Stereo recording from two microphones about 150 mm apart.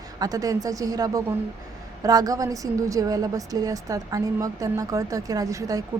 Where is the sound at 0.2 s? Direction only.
25° right (ahead or behind).